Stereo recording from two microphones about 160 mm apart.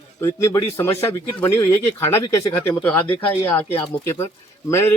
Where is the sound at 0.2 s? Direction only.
20° left (ahead or behind).